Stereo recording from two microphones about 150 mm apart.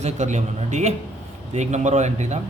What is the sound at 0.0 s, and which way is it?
Speech, 50° right (ahead or behind).